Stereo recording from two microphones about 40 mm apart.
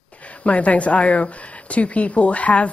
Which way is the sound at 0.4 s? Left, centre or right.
Left.